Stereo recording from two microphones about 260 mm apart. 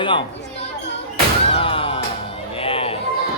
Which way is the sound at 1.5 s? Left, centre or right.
Left.